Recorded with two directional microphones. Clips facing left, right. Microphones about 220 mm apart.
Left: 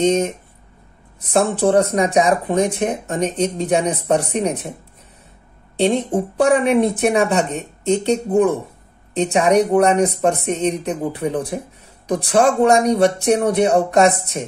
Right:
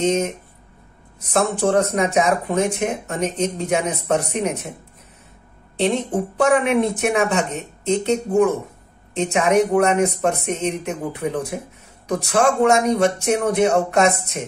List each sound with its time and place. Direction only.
0.0 s speech: 30° left (ahead or behind)
1.3 s speech: 35° left (ahead or behind)
6.3 s speech: 35° left (ahead or behind)